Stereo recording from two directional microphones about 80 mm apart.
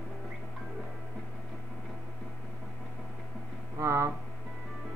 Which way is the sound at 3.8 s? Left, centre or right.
Right.